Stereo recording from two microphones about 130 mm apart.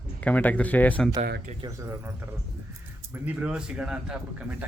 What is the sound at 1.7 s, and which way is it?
Speech, 20° right (ahead or behind).